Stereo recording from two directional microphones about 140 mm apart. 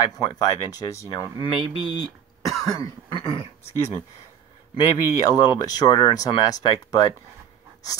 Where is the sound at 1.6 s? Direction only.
35° right (ahead or behind).